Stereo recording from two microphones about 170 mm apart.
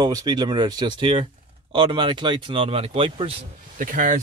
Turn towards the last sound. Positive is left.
turn(degrees=-50)  # may be behind; listen again after turning